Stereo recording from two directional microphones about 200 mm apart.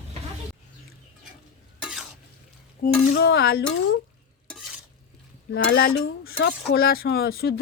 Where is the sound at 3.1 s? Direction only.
55° left (ahead or behind).